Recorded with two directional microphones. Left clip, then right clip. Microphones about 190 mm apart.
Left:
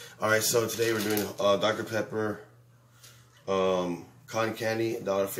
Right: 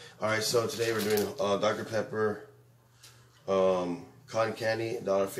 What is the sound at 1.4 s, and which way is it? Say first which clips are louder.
Speech: left 3 dB; 15° left (ahead or behind).